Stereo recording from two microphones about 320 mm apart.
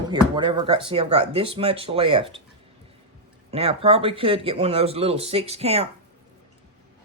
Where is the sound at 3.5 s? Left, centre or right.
Centre.